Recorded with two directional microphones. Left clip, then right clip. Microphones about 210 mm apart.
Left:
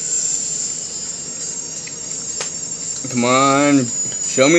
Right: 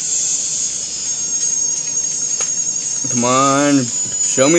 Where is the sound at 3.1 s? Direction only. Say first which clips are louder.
Even; 5° right (ahead or behind).